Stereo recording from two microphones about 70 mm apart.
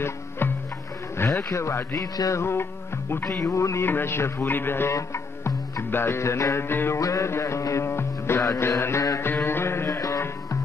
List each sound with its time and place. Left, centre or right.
1.2 s a man's voice: left
1.5 s music: left
2.0 s music: left
2.4 s music: left
3.4 s a man's voice: left
4.9 s music: left
7.0 s music: left
9.2 s music: left